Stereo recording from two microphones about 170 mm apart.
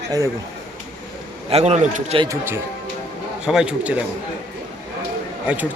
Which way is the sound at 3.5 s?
5° right (ahead or behind).